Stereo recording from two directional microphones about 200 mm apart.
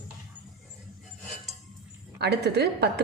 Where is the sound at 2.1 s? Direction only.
55° right (ahead or behind).